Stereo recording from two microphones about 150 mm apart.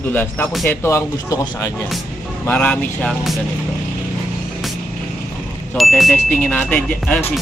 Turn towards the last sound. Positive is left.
turn(degrees=5)  # may be behind; listen again after turning